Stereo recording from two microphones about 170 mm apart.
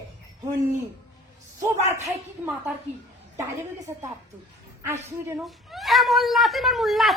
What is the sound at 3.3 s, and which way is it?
Speech, 15° right (ahead or behind).